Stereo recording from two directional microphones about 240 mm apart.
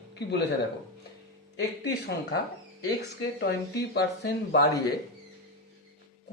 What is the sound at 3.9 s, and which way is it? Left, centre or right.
Speech, left.